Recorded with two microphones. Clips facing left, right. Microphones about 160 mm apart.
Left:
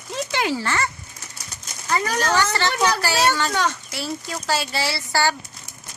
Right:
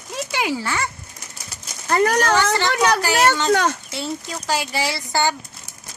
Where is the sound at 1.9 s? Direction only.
60° right (ahead or behind).